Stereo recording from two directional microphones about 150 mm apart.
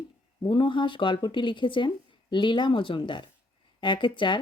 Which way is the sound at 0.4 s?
35° left (ahead or behind).